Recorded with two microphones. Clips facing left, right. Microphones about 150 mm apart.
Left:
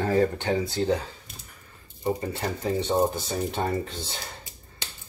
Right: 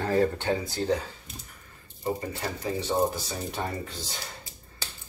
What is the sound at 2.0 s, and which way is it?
Speech, 25° left (ahead or behind).